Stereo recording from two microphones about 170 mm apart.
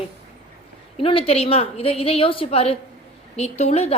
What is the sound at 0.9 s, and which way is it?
A woman's voice, 35° left (ahead or behind).